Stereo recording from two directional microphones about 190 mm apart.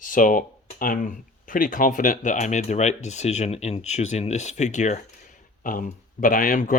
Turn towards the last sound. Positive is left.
turn(degrees=45)  # may be behind; listen again after turning